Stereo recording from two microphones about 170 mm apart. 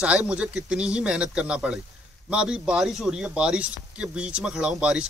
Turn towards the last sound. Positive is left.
turn(degrees=-5)  # may be behind; listen again after turning